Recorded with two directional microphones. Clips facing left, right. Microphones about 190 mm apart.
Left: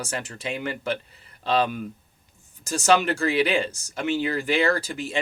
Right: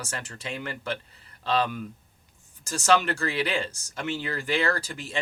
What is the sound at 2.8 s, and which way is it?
Speech, 15° left (ahead or behind).